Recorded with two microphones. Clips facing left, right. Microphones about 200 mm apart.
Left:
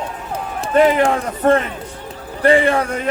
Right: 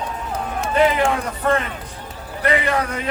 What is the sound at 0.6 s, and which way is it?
A man's voice, 40° left (ahead or behind).